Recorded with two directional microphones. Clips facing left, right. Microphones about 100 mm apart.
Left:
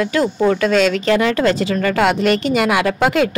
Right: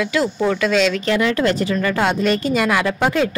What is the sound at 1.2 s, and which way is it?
Speech, 35° left (ahead or behind).